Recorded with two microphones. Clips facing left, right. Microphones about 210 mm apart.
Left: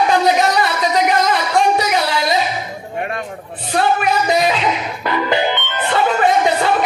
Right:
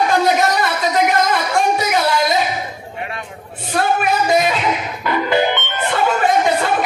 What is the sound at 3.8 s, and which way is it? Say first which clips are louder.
Music: left 1 dB; 50° right (ahead or behind).